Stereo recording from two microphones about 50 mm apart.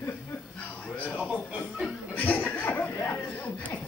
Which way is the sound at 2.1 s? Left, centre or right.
Left.